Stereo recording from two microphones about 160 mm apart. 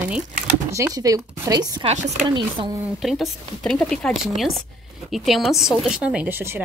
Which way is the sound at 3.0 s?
Centre (ahead or behind).